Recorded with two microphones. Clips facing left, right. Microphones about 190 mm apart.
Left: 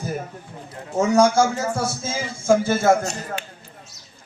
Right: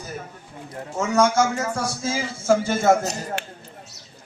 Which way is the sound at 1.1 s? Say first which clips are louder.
Left 2 dB; 30° left (ahead or behind).